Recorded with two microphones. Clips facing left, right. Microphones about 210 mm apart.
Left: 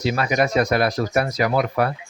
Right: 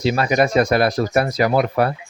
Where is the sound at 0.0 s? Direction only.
30° right (ahead or behind).